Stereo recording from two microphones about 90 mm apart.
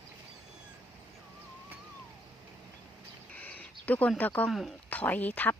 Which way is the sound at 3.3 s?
15° left (ahead or behind).